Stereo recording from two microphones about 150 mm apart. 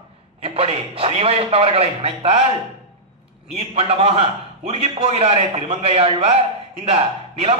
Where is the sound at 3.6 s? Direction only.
40° right (ahead or behind).